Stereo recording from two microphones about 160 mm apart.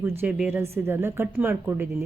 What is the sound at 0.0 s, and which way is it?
Speech, 10° right (ahead or behind).